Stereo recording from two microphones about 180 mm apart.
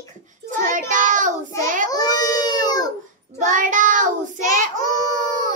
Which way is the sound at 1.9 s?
20° left (ahead or behind).